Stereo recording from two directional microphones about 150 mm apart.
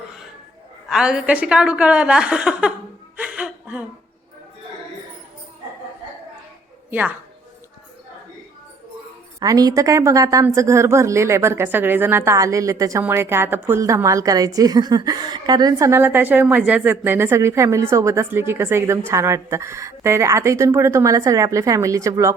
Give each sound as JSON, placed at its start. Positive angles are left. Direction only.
{"t": 0.9, "sound": "a woman's voice", "side_deg": -5}
{"t": 3.2, "sound": "whimper", "side_deg": -5}
{"t": 9.4, "sound": "a woman's voice", "side_deg": -25}